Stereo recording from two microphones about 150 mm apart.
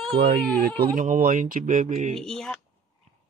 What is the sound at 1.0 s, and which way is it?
Speech, 55° right (ahead or behind).